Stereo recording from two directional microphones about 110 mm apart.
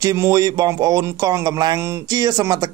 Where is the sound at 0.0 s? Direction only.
30° right (ahead or behind).